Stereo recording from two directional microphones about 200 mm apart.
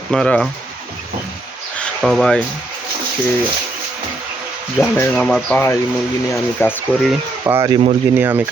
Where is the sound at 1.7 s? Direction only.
5° left (ahead or behind).